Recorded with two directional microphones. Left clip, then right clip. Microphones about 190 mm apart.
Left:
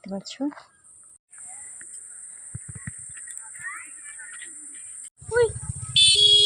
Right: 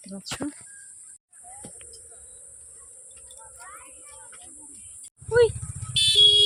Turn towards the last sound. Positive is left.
turn(degrees=0)  # may be behind; listen again after turning